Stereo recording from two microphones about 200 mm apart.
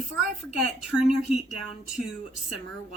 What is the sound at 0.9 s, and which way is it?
Speech, 5° right (ahead or behind).